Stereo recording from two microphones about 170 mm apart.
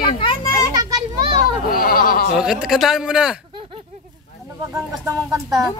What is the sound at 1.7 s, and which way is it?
Goat, 60° left (ahead or behind).